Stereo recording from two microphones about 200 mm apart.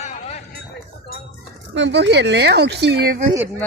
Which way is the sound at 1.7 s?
65° right (ahead or behind).